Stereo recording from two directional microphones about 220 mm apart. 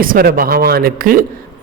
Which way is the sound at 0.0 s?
40° right (ahead or behind).